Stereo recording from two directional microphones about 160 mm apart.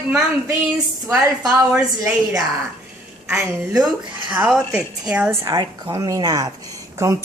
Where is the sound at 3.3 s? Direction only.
20° right (ahead or behind).